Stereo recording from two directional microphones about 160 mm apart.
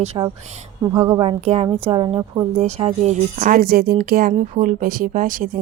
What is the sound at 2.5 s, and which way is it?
Speech, 45° right (ahead or behind).